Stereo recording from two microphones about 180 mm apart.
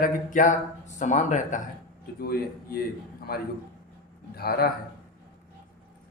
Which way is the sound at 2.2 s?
55° left (ahead or behind).